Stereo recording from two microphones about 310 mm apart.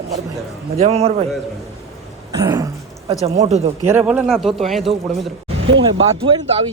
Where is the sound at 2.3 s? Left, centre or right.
Centre.